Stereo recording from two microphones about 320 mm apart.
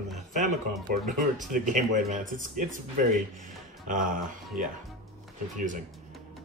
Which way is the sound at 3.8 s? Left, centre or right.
Right.